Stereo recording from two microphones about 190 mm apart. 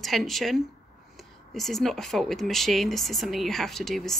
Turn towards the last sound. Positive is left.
turn(degrees=0)  # may be behind; listen again after turning